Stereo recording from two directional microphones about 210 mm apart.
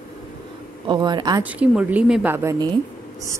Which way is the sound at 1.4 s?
5° right (ahead or behind).